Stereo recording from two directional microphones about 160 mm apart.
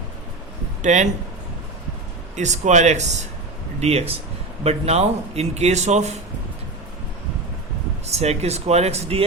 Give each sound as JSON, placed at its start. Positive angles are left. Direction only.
{"t": 0.8, "sound": "speech", "side_deg": -50}
{"t": 2.3, "sound": "speech", "side_deg": -45}
{"t": 8.0, "sound": "speech", "side_deg": -40}